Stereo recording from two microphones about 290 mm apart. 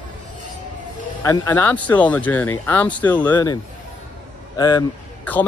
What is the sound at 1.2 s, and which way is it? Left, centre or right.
A man's voice, centre.